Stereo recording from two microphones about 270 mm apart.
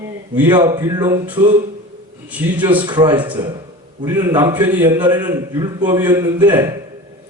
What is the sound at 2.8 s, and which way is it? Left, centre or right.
A man's voice, centre.